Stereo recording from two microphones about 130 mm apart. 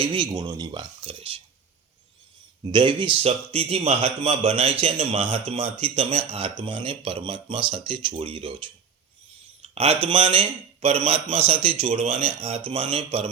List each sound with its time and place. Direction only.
0.0 s speech: 40° right (ahead or behind)
2.6 s speech: 40° right (ahead or behind)
3.2 s a man's voice: 50° right (ahead or behind)
9.6 s a man's voice: 50° right (ahead or behind)